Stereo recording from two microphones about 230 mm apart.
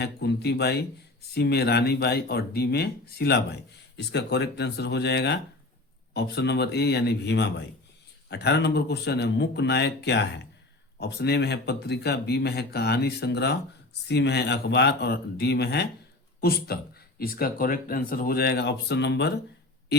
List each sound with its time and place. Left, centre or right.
0.0 s speech: left